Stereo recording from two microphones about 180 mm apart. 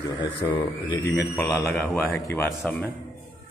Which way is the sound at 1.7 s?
5° left (ahead or behind).